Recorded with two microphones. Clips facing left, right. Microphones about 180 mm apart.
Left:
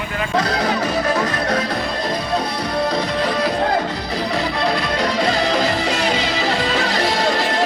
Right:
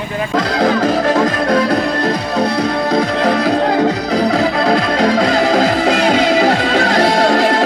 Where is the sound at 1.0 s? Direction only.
50° right (ahead or behind); by 4.0 s 65° right (ahead or behind).